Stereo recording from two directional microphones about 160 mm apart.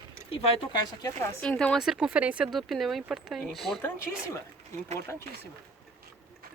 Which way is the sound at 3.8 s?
15° left (ahead or behind).